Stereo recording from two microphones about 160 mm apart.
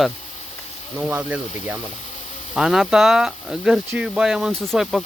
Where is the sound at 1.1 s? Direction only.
10° right (ahead or behind).